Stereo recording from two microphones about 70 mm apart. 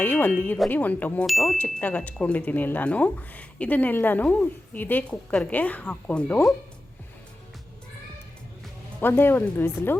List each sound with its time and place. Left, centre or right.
0.0 s speech: left
1.3 s speech: centre
1.5 s speech: left
5.0 s a woman's voice: centre
5.5 s speech: left
9.0 s speech: left